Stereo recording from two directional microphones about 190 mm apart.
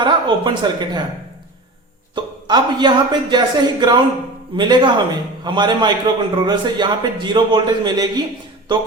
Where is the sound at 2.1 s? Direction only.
25° right (ahead or behind).